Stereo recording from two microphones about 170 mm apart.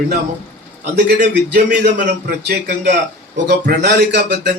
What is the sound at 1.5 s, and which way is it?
A man's voice, 70° right (ahead or behind).